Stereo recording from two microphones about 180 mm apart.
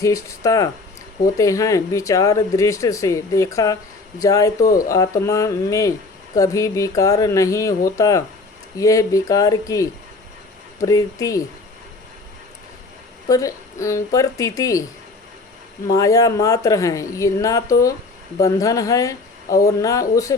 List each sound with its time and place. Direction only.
0.0 s a woman's voice: 20° left (ahead or behind)
13.2 s a woman's voice: 20° left (ahead or behind)
15.9 s a woman's voice: 20° left (ahead or behind)